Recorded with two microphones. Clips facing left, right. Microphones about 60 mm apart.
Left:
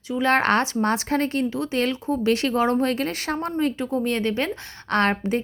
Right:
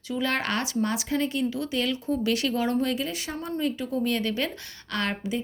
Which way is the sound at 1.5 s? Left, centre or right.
Left.